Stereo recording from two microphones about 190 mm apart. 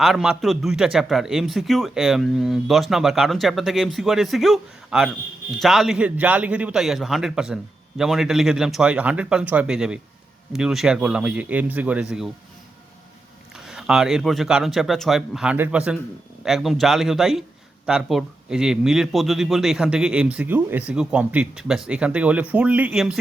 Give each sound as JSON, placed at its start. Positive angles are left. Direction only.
{"t": 0.0, "sound": "a man's voice", "side_deg": -5}
{"t": 13.7, "sound": "a man's voice", "side_deg": -5}